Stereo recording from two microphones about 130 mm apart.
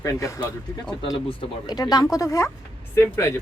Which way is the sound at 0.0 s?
25° left (ahead or behind).